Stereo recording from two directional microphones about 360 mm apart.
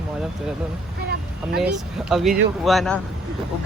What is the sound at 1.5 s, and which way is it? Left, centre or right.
Speech, centre.